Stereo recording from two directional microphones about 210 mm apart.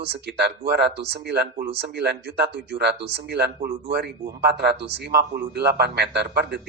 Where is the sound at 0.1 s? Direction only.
50° right (ahead or behind).